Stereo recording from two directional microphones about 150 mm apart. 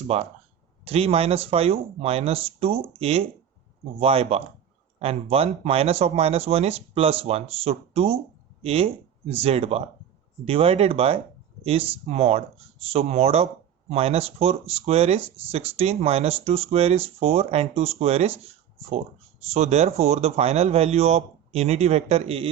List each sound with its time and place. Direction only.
0.1 s speech: 40° right (ahead or behind)
19.5 s speech: 50° right (ahead or behind)